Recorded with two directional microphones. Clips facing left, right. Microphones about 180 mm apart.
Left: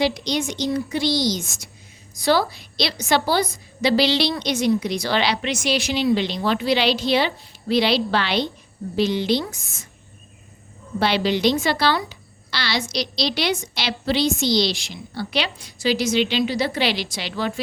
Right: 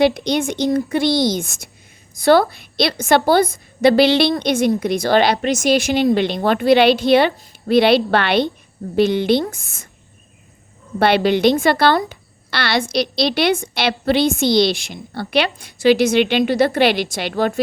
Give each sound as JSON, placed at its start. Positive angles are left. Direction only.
{"t": 0.0, "sound": "a woman's voice", "side_deg": -55}
{"t": 11.0, "sound": "a woman's voice", "side_deg": -55}